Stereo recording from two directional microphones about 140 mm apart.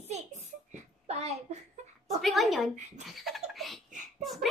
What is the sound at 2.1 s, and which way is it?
Speech, centre (ahead or behind).